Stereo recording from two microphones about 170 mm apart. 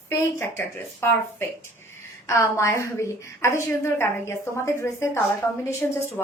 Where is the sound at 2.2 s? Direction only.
15° left (ahead or behind).